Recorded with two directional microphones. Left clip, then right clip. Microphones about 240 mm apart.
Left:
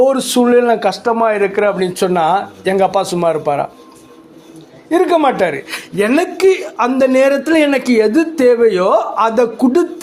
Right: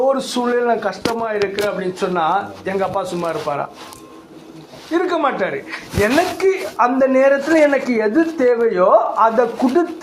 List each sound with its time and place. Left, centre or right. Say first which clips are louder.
0.0 s a man's voice: left 5 dB; left
4.9 s a man's voice: left 6 dB; left